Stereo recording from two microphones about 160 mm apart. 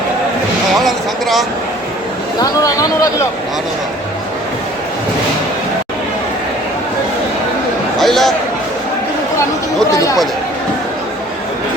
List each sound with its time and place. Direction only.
0.8 s a sound: centre (ahead or behind)
2.4 s speech: 20° left (ahead or behind)
7.9 s a man's voice: centre (ahead or behind)
9.9 s speech: 20° left (ahead or behind)